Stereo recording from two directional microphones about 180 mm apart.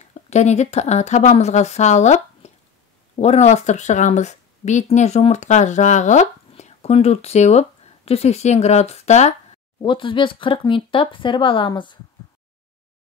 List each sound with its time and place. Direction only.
0.3 s speech: 40° left (ahead or behind)
9.8 s speech: 25° left (ahead or behind)